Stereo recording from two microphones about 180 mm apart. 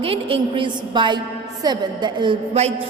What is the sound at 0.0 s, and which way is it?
A woman's voice, 30° right (ahead or behind).